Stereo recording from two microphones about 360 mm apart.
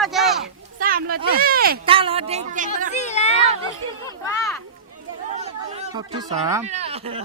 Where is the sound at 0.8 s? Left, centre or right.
Right.